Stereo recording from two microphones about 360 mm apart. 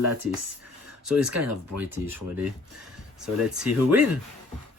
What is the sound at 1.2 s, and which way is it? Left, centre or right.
Speech, right.